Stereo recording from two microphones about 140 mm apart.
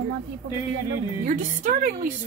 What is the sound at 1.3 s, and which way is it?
Speech, 70° right (ahead or behind).